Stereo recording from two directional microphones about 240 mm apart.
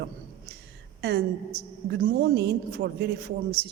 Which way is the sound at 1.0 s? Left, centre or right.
Right.